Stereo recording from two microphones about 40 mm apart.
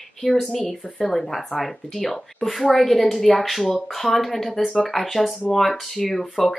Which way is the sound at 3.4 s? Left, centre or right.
Centre.